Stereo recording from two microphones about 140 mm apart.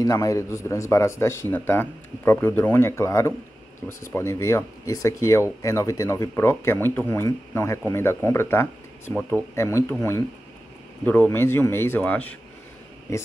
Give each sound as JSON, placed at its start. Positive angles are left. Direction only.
{"t": 0.0, "sound": "a man's voice", "side_deg": 25}
{"t": 11.1, "sound": "speech", "side_deg": 15}